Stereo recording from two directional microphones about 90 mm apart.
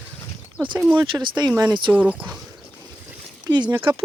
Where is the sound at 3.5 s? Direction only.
60° right (ahead or behind).